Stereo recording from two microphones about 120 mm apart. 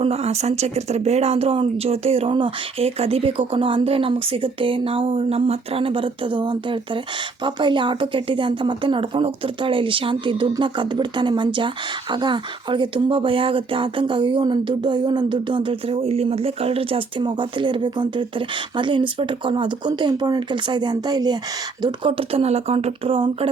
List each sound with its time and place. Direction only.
0.0 s speech: 60° right (ahead or behind); by 21.3 s 35° right (ahead or behind)
21.8 s speech: 45° right (ahead or behind)